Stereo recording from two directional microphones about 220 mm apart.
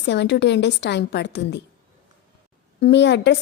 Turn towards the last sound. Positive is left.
turn(degrees=50)  # may be behind; listen again after turning